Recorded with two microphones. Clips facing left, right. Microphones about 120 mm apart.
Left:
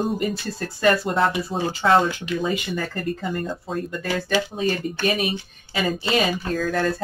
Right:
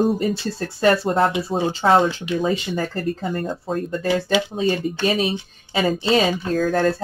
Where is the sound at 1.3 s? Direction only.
20° right (ahead or behind).